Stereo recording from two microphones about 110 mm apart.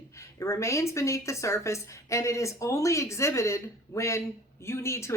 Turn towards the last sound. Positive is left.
turn(degrees=25)  # may be behind; listen again after turning